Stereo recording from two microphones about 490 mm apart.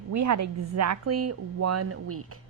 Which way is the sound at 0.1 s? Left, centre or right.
Right.